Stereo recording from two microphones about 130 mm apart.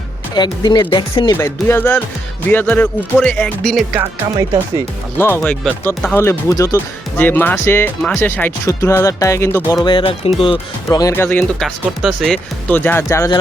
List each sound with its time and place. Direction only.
0.3 s speech: 35° left (ahead or behind)
1.4 s speech: 20° left (ahead or behind)
5.1 s speech: 15° left (ahead or behind)
6.1 s speech: 20° left (ahead or behind)
7.2 s speech: 15° left (ahead or behind)
9.8 s speech: 40° left (ahead or behind)
10.8 s speech: 25° left (ahead or behind)
11.1 s speech: 15° left (ahead or behind)
11.6 s speech: centre (ahead or behind)
12.6 s speech: 15° left (ahead or behind)